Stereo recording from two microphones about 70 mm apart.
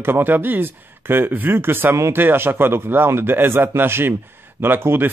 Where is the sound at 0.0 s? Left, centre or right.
Right.